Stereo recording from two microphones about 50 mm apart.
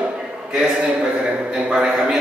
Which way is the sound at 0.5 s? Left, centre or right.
Centre.